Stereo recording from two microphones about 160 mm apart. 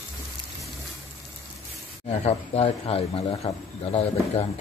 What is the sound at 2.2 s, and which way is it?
Speech, 40° left (ahead or behind).